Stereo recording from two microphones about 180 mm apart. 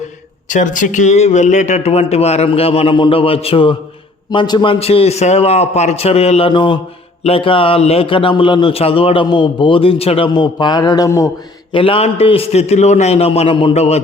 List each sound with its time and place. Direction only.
0.4 s a man's voice: 45° left (ahead or behind); by 11.3 s 20° left (ahead or behind)
11.7 s speech: 30° left (ahead or behind)